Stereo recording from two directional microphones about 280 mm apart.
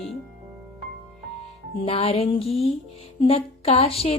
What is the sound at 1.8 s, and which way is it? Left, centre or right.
Music, left.